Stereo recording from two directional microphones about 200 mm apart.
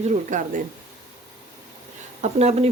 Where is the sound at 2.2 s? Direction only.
30° right (ahead or behind).